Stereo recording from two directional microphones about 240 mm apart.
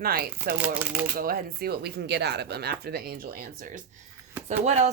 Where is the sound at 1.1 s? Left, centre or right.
Right.